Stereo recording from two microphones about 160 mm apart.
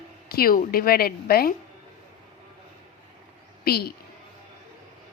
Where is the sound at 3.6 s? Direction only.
80° left.